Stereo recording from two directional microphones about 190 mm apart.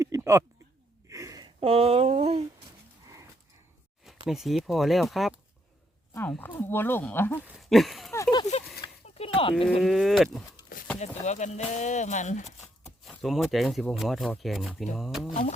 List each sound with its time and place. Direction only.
0.0 s a sound: 15° right (ahead or behind)
1.6 s speech: 30° right (ahead or behind)
4.3 s speech: centre (ahead or behind)
7.4 s speech: centre (ahead or behind)
8.1 s a sound: 20° left (ahead or behind)
9.0 s a sound: 30° left (ahead or behind)
9.8 s speech: centre (ahead or behind)
11.0 s speech: 35° left (ahead or behind)
13.1 s speech: centre (ahead or behind)
15.3 s speech: 40° left (ahead or behind)